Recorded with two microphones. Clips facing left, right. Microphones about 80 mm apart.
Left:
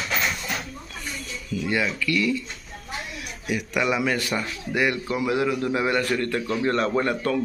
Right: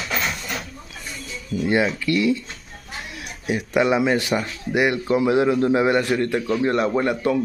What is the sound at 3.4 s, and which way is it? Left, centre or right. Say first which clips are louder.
Speech: right 5 dB; right.